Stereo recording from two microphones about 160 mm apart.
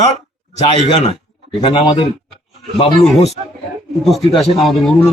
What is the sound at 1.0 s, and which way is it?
A man's voice, 30° left (ahead or behind).